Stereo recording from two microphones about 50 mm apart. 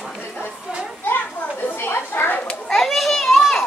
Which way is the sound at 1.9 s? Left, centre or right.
Left.